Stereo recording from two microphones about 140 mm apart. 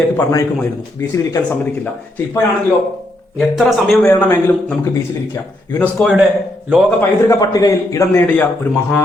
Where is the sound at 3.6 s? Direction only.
Centre (ahead or behind).